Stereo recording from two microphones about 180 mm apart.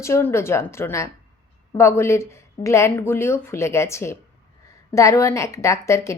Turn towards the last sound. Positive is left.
turn(degrees=15)  # may be behind; listen again after turning